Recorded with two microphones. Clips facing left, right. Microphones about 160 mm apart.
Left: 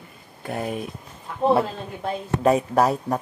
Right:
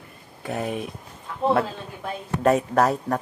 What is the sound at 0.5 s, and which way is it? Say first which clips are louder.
Speech: even; centre (ahead or behind).